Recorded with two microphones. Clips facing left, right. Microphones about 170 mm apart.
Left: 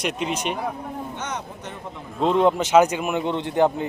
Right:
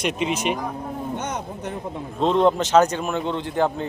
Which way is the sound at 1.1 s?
55° right (ahead or behind).